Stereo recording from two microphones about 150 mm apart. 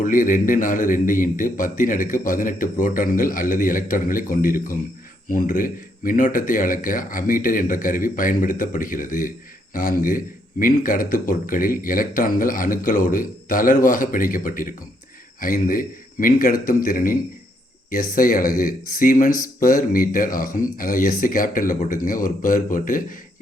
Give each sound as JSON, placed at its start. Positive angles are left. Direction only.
{"t": 0.0, "sound": "a man's voice", "side_deg": 65}